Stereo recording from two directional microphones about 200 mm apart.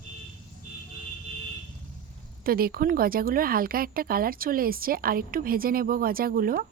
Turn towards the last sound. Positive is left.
turn(degrees=-45)  # may be behind; listen again after turning